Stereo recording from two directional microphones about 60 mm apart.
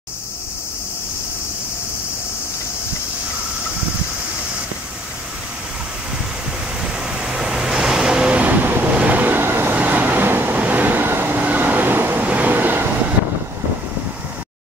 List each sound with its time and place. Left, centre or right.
6.8 s vehicle: centre; by 9.8 s right
9.8 s vehicle: right
12.3 s train: right